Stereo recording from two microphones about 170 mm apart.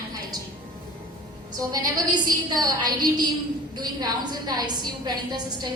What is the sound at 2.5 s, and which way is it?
A woman's voice, 25° right (ahead or behind).